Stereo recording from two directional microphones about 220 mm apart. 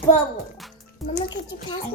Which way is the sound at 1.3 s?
55° left (ahead or behind).